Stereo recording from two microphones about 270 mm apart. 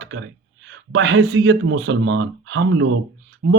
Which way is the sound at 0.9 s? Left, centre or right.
Right.